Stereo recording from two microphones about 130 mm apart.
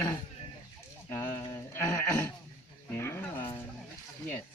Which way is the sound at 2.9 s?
20° left (ahead or behind).